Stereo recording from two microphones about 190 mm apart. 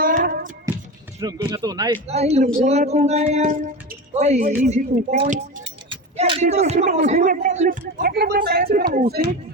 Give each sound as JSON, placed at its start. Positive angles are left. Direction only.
{"t": 0.0, "sound": "a sound", "side_deg": -45}
{"t": 1.2, "sound": "speech", "side_deg": -20}
{"t": 2.0, "sound": "speech", "side_deg": -35}
{"t": 5.6, "sound": "speech", "side_deg": -25}